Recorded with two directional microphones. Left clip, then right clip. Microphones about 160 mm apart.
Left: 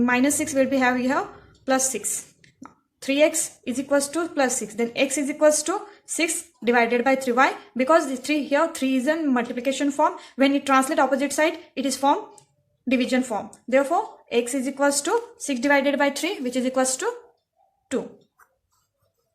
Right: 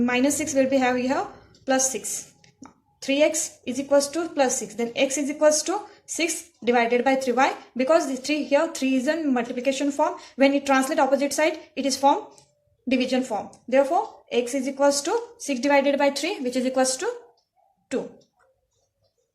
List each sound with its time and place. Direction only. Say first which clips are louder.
0.0 s a woman's voice: left 1 dB; 35° left (ahead or behind)